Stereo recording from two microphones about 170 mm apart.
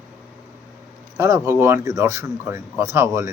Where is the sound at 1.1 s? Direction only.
15° right (ahead or behind).